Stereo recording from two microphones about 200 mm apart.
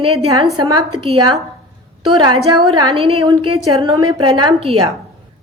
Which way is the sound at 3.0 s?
30° right (ahead or behind).